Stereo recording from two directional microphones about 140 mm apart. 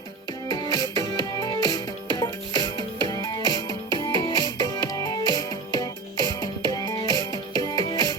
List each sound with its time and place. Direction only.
0.4 s music: 30° left (ahead or behind)